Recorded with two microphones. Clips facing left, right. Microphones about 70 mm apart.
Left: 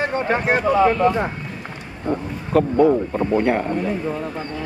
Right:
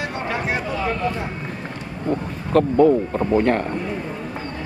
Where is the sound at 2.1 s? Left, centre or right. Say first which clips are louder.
Even; centre.